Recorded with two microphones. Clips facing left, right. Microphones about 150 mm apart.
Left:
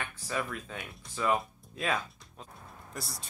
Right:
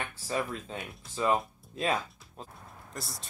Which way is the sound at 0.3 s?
30° right (ahead or behind).